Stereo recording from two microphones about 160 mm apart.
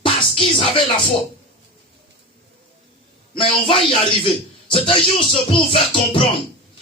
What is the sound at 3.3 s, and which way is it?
A man's voice, 30° left (ahead or behind).